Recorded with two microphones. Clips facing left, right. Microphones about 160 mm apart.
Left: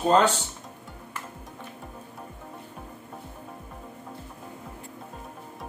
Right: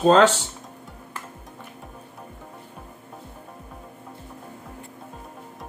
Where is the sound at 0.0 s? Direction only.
90° right.